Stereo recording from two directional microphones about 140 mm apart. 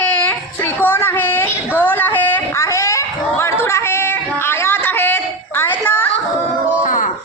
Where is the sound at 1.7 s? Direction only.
15° left (ahead or behind).